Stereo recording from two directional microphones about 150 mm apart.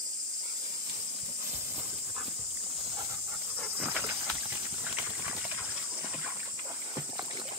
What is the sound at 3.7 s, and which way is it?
Insect, 10° right (ahead or behind).